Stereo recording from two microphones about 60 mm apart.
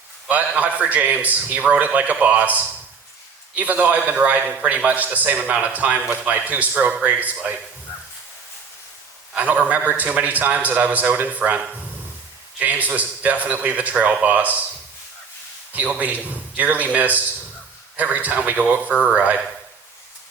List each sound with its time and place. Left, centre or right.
0.3 s a man's voice: right
9.3 s a man's voice: right
15.7 s a man's voice: right